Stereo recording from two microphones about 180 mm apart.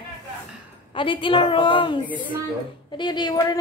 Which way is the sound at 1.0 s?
30° left (ahead or behind).